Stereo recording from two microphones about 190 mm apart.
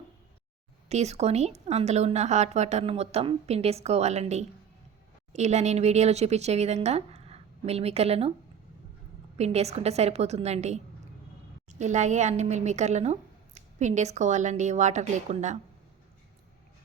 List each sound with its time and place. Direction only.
0.9 s a woman's voice: 35° right (ahead or behind)
9.4 s a woman's voice: 35° right (ahead or behind)